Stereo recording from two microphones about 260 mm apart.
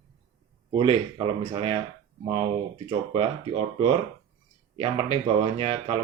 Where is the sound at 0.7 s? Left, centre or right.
Right.